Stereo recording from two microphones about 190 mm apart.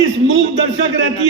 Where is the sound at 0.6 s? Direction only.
80° right.